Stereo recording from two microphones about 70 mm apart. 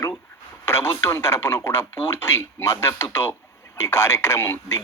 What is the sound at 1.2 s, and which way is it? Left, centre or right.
Speech, left.